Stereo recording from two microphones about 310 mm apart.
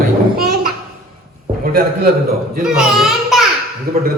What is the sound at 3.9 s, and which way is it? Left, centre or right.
Speech, right.